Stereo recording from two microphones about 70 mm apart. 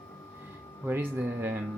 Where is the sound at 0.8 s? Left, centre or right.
Right.